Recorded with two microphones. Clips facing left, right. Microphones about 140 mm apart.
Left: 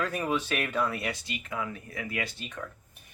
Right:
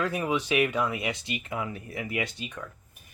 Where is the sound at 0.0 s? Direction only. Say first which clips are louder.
Right 2 dB; 10° right (ahead or behind).